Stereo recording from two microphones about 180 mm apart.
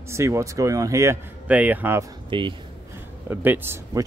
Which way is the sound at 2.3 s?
30° right (ahead or behind).